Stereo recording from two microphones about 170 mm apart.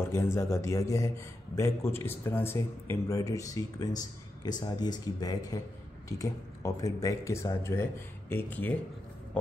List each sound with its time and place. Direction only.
0.0 s a man's voice: 15° left (ahead or behind)